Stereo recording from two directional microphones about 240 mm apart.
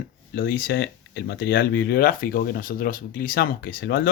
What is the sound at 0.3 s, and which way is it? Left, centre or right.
Speech, left.